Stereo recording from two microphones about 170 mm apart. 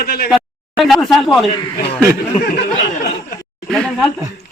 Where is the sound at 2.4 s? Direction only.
80° left.